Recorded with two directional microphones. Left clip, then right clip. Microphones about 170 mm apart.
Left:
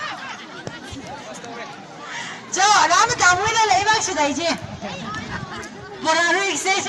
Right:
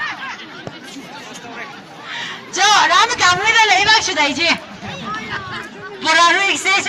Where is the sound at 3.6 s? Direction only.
5° left (ahead or behind).